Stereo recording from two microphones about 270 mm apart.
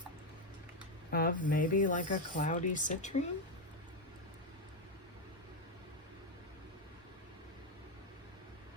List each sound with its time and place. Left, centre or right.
1.1 s speech: left